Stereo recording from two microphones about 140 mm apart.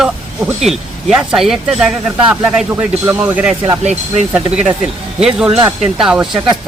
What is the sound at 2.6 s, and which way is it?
A woman's voice, 15° right (ahead or behind).